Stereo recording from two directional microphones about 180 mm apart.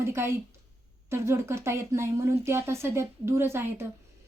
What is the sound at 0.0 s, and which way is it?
A woman's voice, 15° right (ahead or behind).